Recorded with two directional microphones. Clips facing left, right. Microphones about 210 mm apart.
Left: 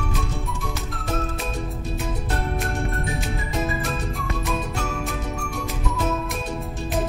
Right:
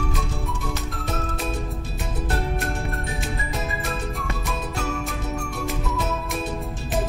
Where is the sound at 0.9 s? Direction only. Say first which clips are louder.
Left 2 dB; centre (ahead or behind).